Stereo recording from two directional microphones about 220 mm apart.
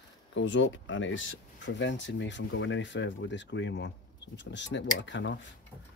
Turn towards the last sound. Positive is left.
turn(degrees=55)  # may be behind; listen again after turning